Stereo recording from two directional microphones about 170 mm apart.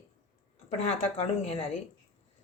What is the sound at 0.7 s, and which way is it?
Speech, 40° left (ahead or behind).